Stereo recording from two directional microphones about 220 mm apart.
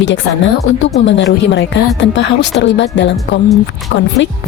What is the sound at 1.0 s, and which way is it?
A woman's voice, 55° left (ahead or behind).